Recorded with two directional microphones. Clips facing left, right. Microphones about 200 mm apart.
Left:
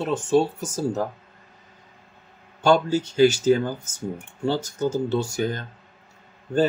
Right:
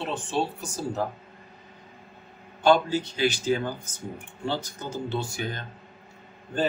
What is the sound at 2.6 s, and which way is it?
Speech, 45° left (ahead or behind).